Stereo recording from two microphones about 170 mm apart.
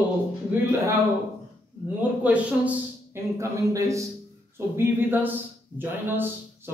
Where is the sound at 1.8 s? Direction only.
10° right (ahead or behind).